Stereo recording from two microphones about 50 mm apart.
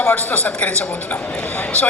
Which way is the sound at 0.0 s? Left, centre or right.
Left.